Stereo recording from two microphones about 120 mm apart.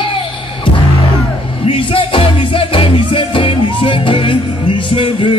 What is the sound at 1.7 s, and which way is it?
Music, 45° left (ahead or behind).